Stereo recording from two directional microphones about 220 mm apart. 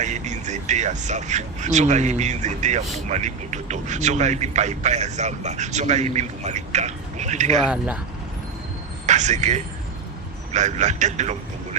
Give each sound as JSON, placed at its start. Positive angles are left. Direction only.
{"t": 0.0, "sound": "speech", "side_deg": -35}
{"t": 7.6, "sound": "speech", "side_deg": -5}
{"t": 9.0, "sound": "speech", "side_deg": -30}